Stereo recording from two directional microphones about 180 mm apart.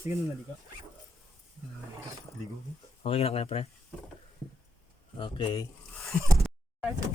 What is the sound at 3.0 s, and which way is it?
Speech, 35° left (ahead or behind).